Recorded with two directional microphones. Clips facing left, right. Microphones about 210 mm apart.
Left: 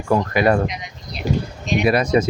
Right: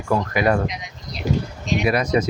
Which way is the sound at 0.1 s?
30° left (ahead or behind).